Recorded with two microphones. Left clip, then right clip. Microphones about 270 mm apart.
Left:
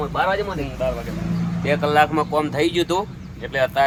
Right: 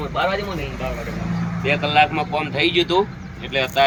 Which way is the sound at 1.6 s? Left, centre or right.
Centre.